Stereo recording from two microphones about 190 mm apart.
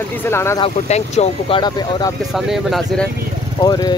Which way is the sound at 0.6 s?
35° left (ahead or behind).